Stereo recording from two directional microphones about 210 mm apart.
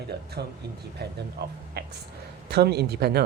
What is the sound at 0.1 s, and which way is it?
Speech, 50° right (ahead or behind).